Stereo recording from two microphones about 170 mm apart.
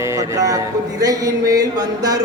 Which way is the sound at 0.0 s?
20° right (ahead or behind).